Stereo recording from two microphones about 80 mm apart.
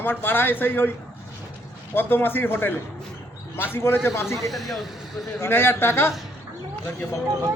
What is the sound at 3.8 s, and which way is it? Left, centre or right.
Speech, left.